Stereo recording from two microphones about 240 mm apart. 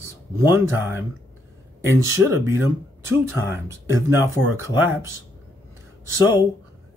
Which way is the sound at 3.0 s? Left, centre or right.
Centre.